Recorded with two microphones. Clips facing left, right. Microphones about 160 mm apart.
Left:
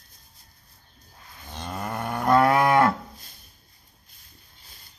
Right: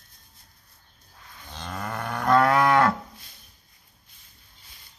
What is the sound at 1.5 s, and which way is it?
Livestock, 15° left (ahead or behind).